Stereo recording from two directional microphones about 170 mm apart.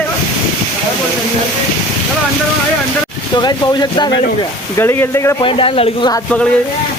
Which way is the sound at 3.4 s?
25° left (ahead or behind).